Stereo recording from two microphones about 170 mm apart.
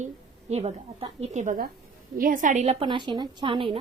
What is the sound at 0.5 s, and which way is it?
A woman's voice, 40° right (ahead or behind).